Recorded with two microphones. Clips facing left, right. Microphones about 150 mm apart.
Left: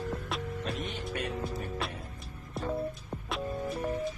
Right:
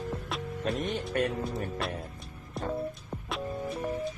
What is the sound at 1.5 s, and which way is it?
Music, centre (ahead or behind).